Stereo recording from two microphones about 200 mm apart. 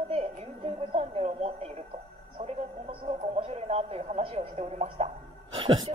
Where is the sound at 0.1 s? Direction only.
30° right (ahead or behind).